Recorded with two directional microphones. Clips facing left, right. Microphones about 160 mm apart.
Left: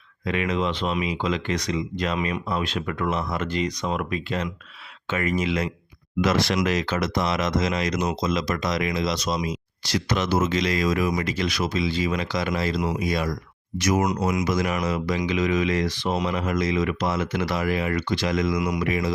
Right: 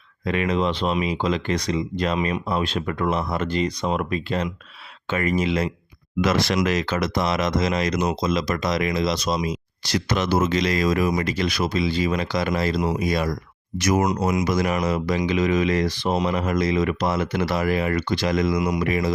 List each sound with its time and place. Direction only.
0.3 s speech: 35° right (ahead or behind)
6.7 s speech: 55° right (ahead or behind)
7.0 s speech: 40° right (ahead or behind)